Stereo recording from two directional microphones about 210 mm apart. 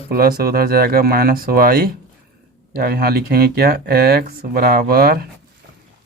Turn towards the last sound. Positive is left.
turn(degrees=-45)  # may be behind; listen again after turning